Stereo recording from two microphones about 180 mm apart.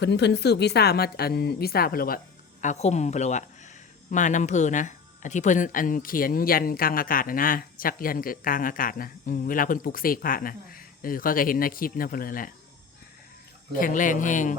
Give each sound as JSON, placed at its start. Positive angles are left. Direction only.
{"t": 0.0, "sound": "a woman's voice", "side_deg": 70}
{"t": 13.7, "sound": "speech", "side_deg": 50}